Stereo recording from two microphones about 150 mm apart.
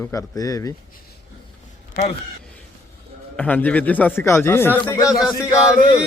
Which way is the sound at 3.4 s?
10° left (ahead or behind).